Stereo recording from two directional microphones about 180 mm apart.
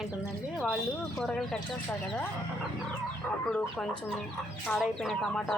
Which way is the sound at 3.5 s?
5° left (ahead or behind).